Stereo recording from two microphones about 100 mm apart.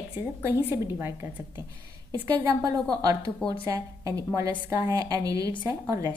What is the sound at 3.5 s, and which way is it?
A woman's voice, 35° right (ahead or behind).